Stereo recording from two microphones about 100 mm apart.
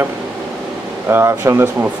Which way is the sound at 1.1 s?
25° right (ahead or behind).